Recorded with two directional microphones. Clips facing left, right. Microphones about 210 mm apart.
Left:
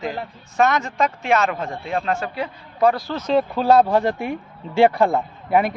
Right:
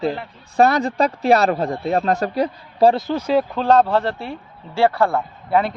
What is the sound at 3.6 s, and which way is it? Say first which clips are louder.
A man's voice: left 2 dB; 10° left (ahead or behind).